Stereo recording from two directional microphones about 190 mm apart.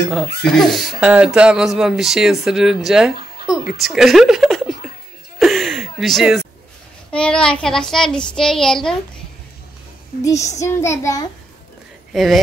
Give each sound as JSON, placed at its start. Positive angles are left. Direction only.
{"t": 0.5, "sound": "speech", "side_deg": 0}
{"t": 5.4, "sound": "a sound", "side_deg": 0}
{"t": 7.1, "sound": "speech", "side_deg": 5}
{"t": 10.6, "sound": "child singing", "side_deg": 15}
{"t": 12.1, "sound": "speech", "side_deg": 0}